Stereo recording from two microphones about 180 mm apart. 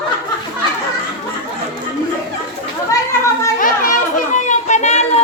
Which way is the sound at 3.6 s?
50° left (ahead or behind).